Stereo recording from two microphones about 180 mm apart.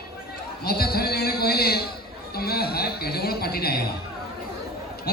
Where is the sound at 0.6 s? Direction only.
60° left (ahead or behind).